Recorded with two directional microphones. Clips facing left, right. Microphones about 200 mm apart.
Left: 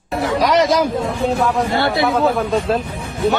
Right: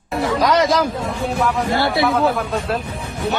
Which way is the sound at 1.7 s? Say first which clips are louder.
Left 1 dB; 20° left (ahead or behind).